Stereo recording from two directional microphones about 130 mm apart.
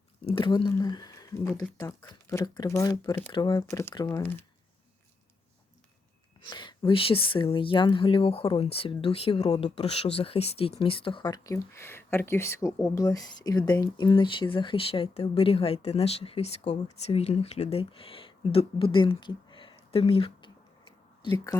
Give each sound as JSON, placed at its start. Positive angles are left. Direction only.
{"t": 0.3, "sound": "speech", "side_deg": 40}
{"t": 3.7, "sound": "speech", "side_deg": 20}
{"t": 3.9, "sound": "speech", "side_deg": 35}
{"t": 4.2, "sound": "speech", "side_deg": 15}
{"t": 6.4, "sound": "speech", "side_deg": 35}
{"t": 11.5, "sound": "speech", "side_deg": 20}
{"t": 21.2, "sound": "speech", "side_deg": 35}